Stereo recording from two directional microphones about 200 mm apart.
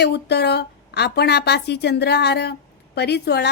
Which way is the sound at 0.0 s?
55° left (ahead or behind).